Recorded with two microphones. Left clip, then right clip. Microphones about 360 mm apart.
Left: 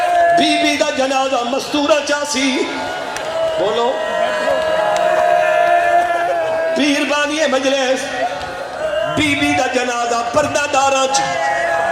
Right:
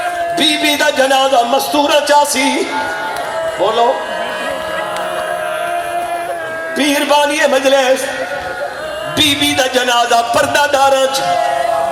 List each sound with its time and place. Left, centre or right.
0.3 s speech: right
5.4 s music: left
6.7 s speech: right
9.1 s speech: right